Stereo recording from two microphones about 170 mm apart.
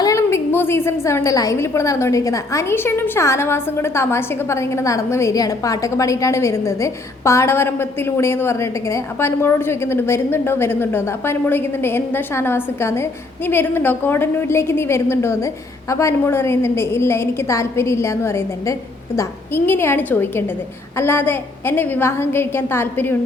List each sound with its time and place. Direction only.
0.0 s a woman's voice: 15° left (ahead or behind)